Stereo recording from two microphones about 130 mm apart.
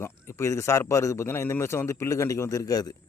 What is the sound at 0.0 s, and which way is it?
Speech, 20° left (ahead or behind).